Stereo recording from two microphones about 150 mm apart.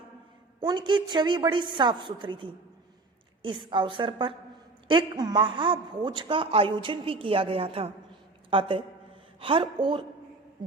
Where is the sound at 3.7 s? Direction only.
35° right (ahead or behind).